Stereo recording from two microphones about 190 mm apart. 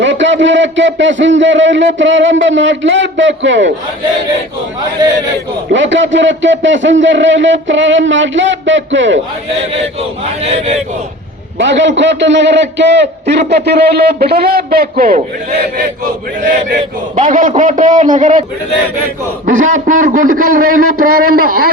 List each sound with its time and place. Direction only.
0.0 s a man's voice: 75° right (ahead or behind)
5.7 s a man's voice: 75° right (ahead or behind)
11.5 s a man's voice: 70° right (ahead or behind); by 15.2 s 50° right (ahead or behind)
17.2 s a man's voice: 45° right (ahead or behind)
19.5 s a man's voice: 40° right (ahead or behind)